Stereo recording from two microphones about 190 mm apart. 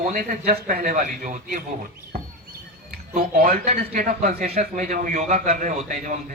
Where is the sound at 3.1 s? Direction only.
45° right (ahead or behind).